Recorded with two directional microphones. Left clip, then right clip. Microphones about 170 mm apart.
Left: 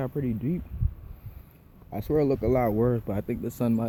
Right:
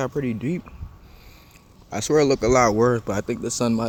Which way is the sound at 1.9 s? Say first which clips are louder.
Right 6 dB; 55° right (ahead or behind).